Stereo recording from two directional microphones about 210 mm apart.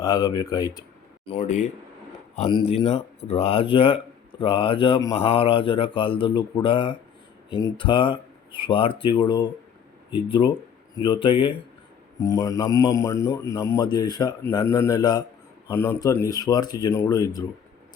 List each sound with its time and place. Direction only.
0.0 s a man's voice: 20° left (ahead or behind)
1.4 s a man's voice: 35° left (ahead or behind); by 17.4 s 15° left (ahead or behind)